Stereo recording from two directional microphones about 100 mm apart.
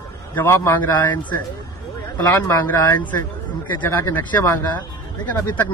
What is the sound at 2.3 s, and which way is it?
Speech, 25° left (ahead or behind).